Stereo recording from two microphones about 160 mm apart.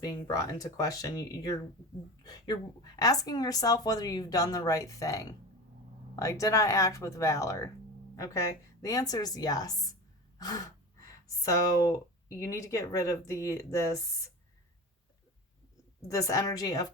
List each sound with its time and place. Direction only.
0.0 s a woman's voice: 20° left (ahead or behind)
16.0 s speech: 20° left (ahead or behind)